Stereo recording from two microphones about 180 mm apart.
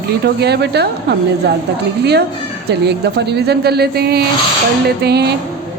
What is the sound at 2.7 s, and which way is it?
Speech, 65° right (ahead or behind).